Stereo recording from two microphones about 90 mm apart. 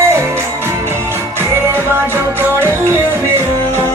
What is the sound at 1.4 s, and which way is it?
Music, 25° right (ahead or behind).